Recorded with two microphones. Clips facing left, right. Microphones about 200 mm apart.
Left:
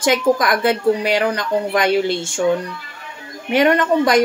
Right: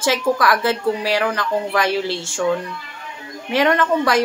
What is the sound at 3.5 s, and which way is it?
Speech, 20° left (ahead or behind).